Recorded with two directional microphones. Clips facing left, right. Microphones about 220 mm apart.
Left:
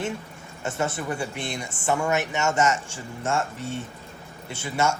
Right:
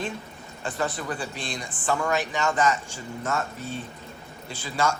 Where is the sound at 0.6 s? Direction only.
25° left (ahead or behind).